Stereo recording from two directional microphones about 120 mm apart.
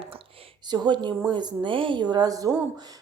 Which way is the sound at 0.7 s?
40° right (ahead or behind).